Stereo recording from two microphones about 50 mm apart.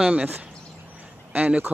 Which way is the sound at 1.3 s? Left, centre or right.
Right.